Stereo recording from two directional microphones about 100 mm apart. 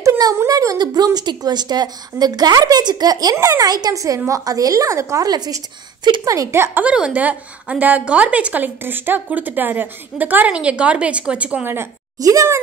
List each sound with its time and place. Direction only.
0.2 s a woman's voice: 35° right (ahead or behind); by 11.7 s 15° right (ahead or behind)
12.2 s speech: 35° right (ahead or behind)